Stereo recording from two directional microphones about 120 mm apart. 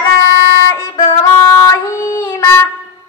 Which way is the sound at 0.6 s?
25° left (ahead or behind).